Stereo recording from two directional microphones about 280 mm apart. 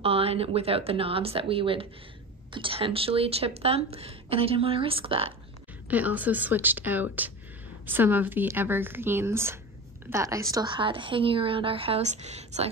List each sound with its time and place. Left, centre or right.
0.0 s speech: centre
5.9 s a woman's voice: centre; by 12.6 s right